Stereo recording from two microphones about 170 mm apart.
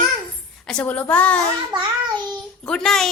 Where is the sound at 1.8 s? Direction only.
25° right (ahead or behind).